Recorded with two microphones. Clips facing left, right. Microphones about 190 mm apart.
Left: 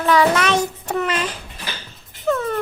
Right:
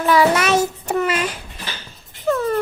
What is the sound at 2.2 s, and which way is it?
Whimper, centre (ahead or behind).